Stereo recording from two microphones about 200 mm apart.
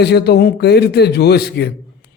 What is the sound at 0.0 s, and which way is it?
A man's voice, 55° left (ahead or behind).